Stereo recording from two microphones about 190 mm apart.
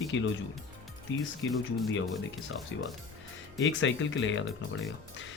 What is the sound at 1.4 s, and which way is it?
Speech, 80° left.